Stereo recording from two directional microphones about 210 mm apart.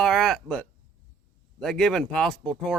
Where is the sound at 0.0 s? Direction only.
Centre (ahead or behind).